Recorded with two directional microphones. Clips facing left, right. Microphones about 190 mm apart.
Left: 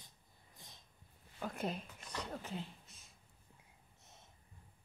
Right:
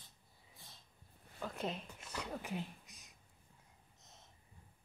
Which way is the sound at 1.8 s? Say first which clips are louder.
Even; 10° right (ahead or behind).